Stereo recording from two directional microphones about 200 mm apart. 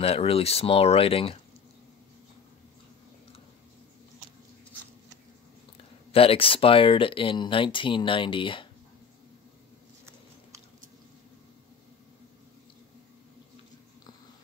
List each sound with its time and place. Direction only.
0.0 s speech: 30° left (ahead or behind)
6.1 s speech: 30° left (ahead or behind)